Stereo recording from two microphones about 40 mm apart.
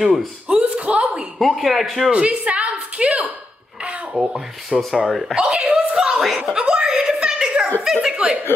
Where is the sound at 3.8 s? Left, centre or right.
Right.